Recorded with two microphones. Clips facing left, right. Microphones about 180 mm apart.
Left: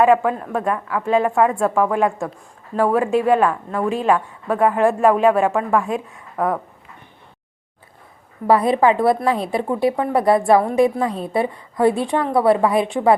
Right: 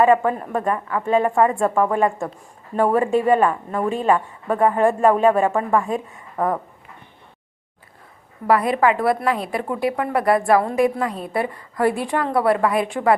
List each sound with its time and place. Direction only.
0.0 s a woman's voice: centre (ahead or behind)
8.4 s a woman's voice: 25° left (ahead or behind)